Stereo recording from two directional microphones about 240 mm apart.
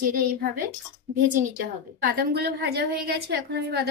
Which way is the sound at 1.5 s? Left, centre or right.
Right.